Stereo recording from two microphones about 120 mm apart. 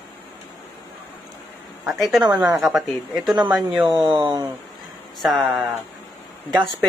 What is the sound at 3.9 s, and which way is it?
Speech, 35° right (ahead or behind).